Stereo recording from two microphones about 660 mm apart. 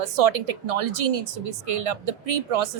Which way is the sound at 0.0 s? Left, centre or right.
Right.